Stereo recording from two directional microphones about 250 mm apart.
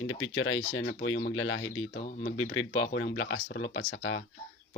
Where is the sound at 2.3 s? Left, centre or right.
Left.